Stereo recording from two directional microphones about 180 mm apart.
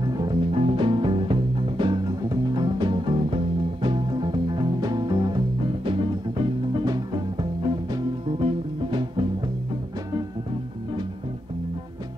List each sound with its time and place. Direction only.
0.0 s music: 20° right (ahead or behind)